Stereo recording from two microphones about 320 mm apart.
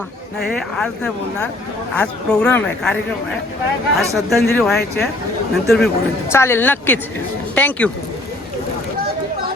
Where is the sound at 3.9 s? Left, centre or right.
Centre.